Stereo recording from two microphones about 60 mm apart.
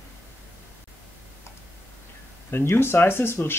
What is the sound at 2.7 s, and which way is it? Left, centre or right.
Speech, left.